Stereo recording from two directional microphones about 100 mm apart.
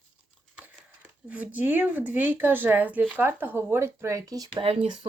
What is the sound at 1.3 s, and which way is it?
Speech, 15° right (ahead or behind).